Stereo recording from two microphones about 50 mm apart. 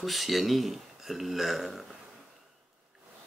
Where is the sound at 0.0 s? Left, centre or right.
Centre.